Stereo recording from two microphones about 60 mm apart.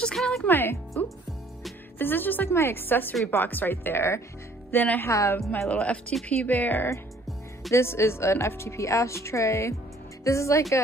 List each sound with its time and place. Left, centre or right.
0.0 s music: centre
0.5 s a woman's voice: left
1.0 s music: left
2.0 s a woman's voice: left
5.0 s speech: left
5.7 s a woman's voice: left
7.7 s speech: left